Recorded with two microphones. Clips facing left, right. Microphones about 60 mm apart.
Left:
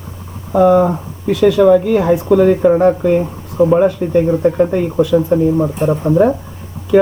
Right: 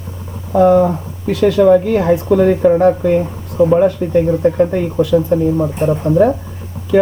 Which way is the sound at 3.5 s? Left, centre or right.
Centre.